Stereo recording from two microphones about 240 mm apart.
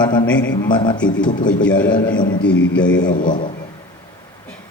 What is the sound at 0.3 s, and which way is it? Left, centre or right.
Speech, left.